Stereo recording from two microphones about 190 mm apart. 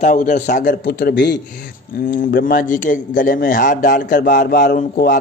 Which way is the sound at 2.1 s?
50° left (ahead or behind).